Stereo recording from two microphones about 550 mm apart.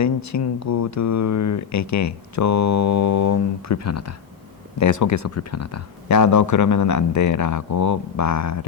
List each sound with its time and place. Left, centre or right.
0.0 s speech: left